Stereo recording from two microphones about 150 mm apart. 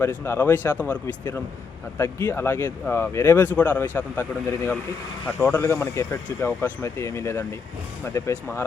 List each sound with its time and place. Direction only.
0.0 s speech: 15° left (ahead or behind)